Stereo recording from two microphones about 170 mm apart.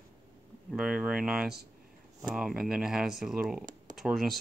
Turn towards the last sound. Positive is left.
turn(degrees=0)  # may be behind; listen again after turning